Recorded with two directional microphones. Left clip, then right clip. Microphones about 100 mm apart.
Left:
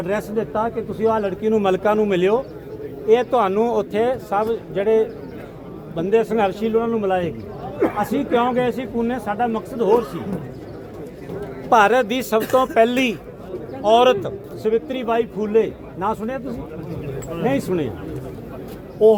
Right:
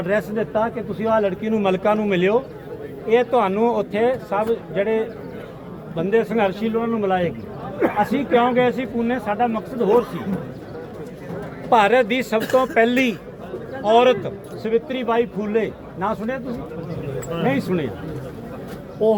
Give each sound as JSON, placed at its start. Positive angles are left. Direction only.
{"t": 0.1, "sound": "a man's voice", "side_deg": 40}
{"t": 7.8, "sound": "a man's voice", "side_deg": 25}
{"t": 8.1, "sound": "a man's voice", "side_deg": 45}
{"t": 11.7, "sound": "a man's voice", "side_deg": 50}
{"t": 14.6, "sound": "speech", "side_deg": 45}
{"t": 17.4, "sound": "a man's voice", "side_deg": 40}